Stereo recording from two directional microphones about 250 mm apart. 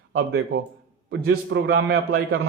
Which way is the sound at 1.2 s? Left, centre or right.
Right.